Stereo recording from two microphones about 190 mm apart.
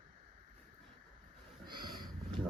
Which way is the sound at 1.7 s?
25° right (ahead or behind).